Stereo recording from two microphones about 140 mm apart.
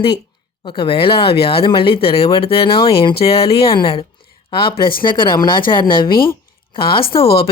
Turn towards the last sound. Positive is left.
turn(degrees=40)  # may be behind; listen again after turning